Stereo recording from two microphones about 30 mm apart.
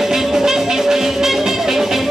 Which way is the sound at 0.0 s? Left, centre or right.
Centre.